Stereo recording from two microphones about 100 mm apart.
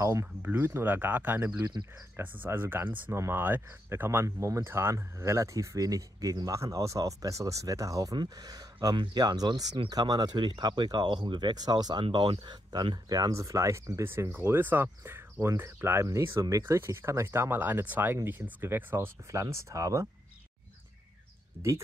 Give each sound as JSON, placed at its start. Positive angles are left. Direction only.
{"t": 0.0, "sound": "speech", "side_deg": -30}
{"t": 1.6, "sound": "speech", "side_deg": -50}
{"t": 2.1, "sound": "speech", "side_deg": -20}
{"t": 21.6, "sound": "speech", "side_deg": -35}